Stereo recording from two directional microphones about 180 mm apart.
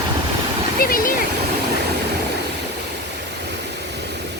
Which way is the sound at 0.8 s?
50° left (ahead or behind).